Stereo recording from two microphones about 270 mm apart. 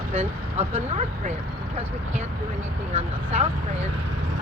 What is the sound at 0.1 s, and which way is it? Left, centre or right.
Speech, right.